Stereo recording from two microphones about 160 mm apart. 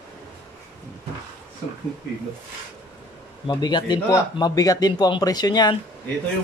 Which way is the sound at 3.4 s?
25° left (ahead or behind).